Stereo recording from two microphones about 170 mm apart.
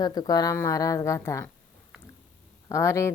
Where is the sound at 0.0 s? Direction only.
20° left (ahead or behind).